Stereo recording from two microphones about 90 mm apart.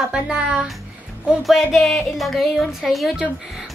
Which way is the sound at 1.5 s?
Centre (ahead or behind).